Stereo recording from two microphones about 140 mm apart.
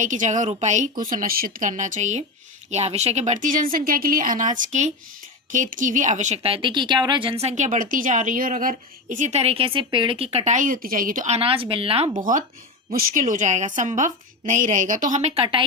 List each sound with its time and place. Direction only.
0.0 s a woman's voice: 65° right (ahead or behind); by 11.3 s 80° right
11.3 s speech: 40° right (ahead or behind)
12.1 s a woman's voice: 65° right (ahead or behind)
12.9 s a woman's voice: 80° right